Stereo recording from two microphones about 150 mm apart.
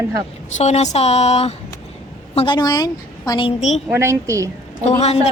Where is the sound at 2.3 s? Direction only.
35° left (ahead or behind).